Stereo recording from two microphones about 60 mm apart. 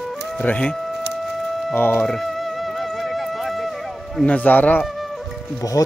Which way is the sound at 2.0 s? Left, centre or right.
Centre.